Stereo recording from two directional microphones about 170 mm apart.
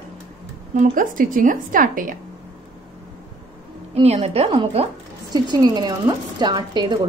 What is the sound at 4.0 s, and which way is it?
Speech, 35° right (ahead or behind).